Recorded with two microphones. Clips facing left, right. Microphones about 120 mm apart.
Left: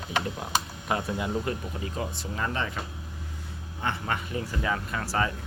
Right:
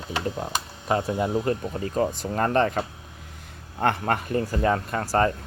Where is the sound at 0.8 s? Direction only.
30° right (ahead or behind).